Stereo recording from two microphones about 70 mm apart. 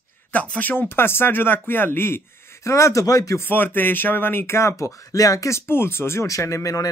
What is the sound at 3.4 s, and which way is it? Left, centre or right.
Speech, left.